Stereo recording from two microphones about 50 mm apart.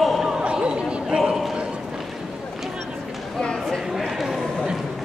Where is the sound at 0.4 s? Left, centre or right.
Right.